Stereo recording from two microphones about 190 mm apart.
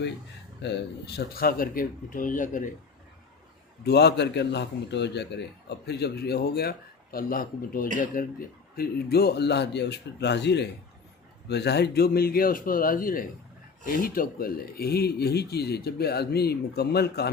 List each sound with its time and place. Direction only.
0.6 s speech: 65° left (ahead or behind); by 2.6 s 45° left (ahead or behind)
3.8 s a man's voice: 60° left (ahead or behind)